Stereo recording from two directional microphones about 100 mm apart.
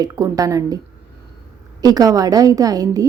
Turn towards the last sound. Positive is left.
turn(degrees=-35)  # may be behind; listen again after turning